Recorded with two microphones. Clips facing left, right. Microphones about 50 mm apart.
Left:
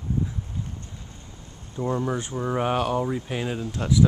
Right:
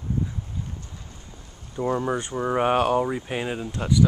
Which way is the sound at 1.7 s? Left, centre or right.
Centre.